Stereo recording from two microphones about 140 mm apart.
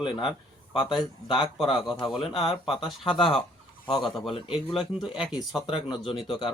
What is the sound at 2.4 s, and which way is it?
Speech, 40° left (ahead or behind).